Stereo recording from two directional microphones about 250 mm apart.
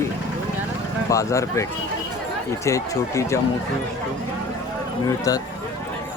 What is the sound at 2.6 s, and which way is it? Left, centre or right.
Speech, centre.